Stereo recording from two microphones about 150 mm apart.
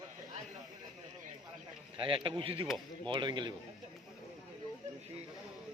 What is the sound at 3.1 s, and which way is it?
Speech, 30° right (ahead or behind).